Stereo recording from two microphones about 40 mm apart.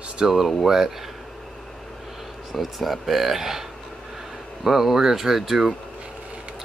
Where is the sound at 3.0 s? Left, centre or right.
Centre.